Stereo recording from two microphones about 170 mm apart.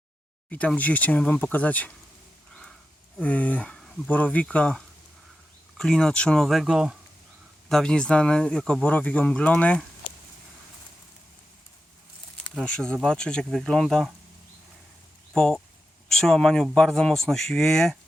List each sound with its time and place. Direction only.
0.5 s speech: 10° left (ahead or behind)
3.2 s speech: 10° left (ahead or behind)
12.5 s speech: 5° left (ahead or behind)
15.4 s speech: 5° left (ahead or behind)